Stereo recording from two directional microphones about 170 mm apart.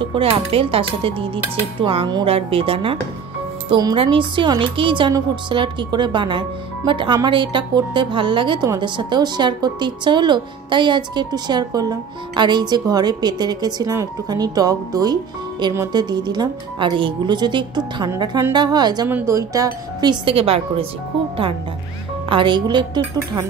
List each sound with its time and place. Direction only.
0.0 s a woman's voice: 30° right (ahead or behind)
22.3 s a woman's voice: 30° right (ahead or behind)